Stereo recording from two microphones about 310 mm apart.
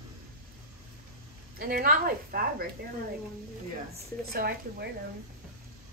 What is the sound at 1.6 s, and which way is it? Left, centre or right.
A woman's voice, right.